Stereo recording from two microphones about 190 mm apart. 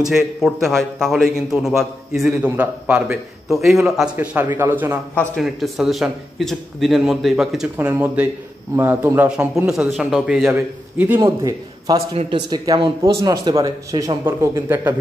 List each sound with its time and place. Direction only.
0.1 s a man's voice: centre (ahead or behind)
5.3 s a man's voice: centre (ahead or behind)